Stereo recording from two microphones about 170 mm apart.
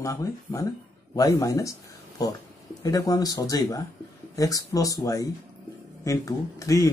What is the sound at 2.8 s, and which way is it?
Speech, 20° left (ahead or behind).